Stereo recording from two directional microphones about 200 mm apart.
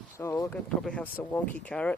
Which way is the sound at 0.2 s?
15° left (ahead or behind).